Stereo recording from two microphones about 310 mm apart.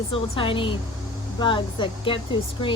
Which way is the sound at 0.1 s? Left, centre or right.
Centre.